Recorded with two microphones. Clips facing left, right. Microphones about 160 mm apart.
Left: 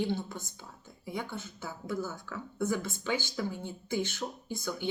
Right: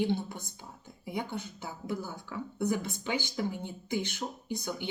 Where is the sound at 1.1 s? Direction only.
20° right (ahead or behind).